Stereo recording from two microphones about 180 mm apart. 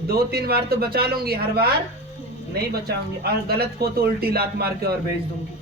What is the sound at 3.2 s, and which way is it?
A man's voice, 60° right (ahead or behind).